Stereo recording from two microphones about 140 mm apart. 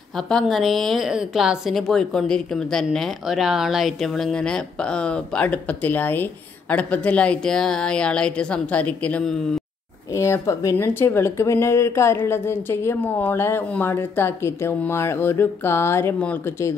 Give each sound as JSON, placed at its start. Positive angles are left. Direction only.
{"t": 0.1, "sound": "a woman's voice", "side_deg": 5}
{"t": 10.1, "sound": "speech", "side_deg": 20}